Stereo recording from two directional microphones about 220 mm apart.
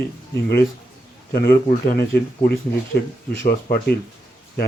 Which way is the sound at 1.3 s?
40° left (ahead or behind).